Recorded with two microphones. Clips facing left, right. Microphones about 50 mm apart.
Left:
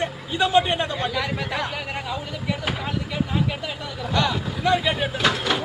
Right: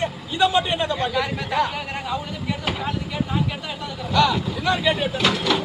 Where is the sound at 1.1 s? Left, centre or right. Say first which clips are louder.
Right 2 dB; centre.